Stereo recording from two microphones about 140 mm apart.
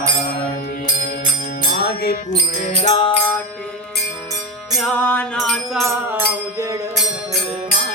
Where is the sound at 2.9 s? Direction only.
40° left (ahead or behind).